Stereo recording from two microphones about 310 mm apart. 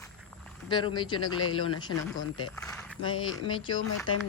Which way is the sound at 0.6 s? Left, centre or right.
Centre.